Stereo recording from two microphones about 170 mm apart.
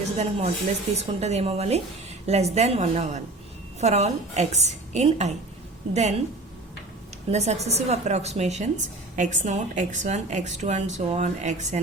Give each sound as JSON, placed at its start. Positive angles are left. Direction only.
{"t": 0.2, "sound": "a woman's voice", "side_deg": -40}
{"t": 7.3, "sound": "a woman's voice", "side_deg": -40}